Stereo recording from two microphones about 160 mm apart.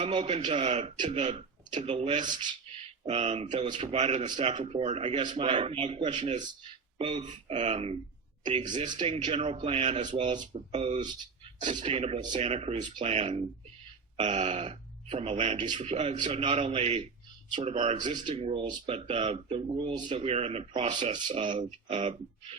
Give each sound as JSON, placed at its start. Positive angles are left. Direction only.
{"t": 0.0, "sound": "speech", "side_deg": -35}
{"t": 1.3, "sound": "speech", "side_deg": -30}
{"t": 3.1, "sound": "speech", "side_deg": -40}
{"t": 7.0, "sound": "speech", "side_deg": -30}
{"t": 7.3, "sound": "speech", "side_deg": -45}
{"t": 8.4, "sound": "speech", "side_deg": -30}
{"t": 9.0, "sound": "speech", "side_deg": -40}
{"t": 10.1, "sound": "speech", "side_deg": -30}
{"t": 18.3, "sound": "speech", "side_deg": -30}
{"t": 20.2, "sound": "speech", "side_deg": -40}
{"t": 21.2, "sound": "speech", "side_deg": -30}